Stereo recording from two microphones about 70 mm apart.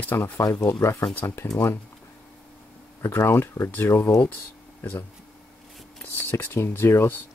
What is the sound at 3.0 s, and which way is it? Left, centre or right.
Speech, left.